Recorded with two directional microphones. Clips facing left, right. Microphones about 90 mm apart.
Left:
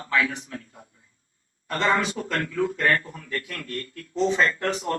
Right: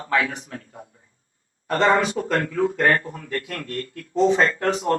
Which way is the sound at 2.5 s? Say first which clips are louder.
Right 2 dB; 30° right (ahead or behind).